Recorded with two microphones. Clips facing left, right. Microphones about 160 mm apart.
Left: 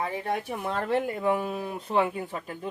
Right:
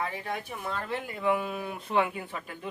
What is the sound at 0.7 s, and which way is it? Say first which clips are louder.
Speech: left 8 dB; 60° left (ahead or behind).